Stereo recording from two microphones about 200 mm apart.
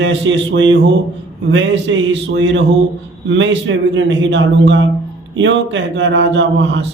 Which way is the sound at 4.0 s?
65° right (ahead or behind).